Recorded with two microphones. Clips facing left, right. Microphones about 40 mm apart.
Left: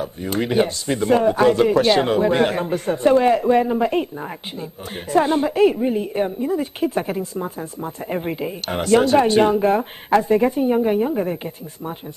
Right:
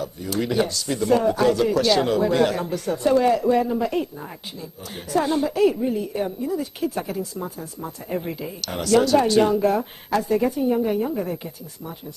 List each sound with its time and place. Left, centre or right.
0.0 s a woman's voice: left
5.1 s a woman's voice: left